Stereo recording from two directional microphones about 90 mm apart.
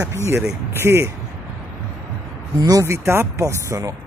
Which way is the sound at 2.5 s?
45° right (ahead or behind).